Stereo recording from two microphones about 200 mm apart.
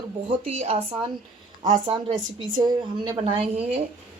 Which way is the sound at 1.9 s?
25° right (ahead or behind).